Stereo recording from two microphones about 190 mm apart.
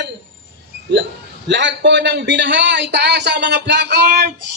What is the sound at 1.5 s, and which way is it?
Speech, 70° right (ahead or behind).